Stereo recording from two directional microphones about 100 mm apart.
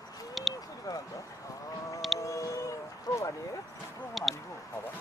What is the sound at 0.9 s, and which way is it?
Speech, 40° left (ahead or behind).